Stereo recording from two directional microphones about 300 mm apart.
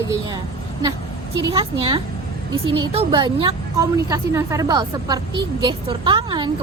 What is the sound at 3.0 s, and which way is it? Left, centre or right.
Speech, centre.